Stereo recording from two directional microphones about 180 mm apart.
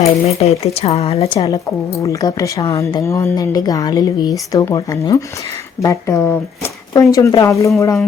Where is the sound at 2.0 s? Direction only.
20° left (ahead or behind).